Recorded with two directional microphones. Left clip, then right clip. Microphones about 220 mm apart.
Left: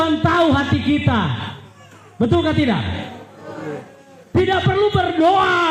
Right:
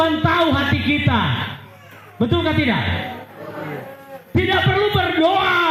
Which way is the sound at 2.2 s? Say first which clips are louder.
Left 1 dB; 50° left (ahead or behind).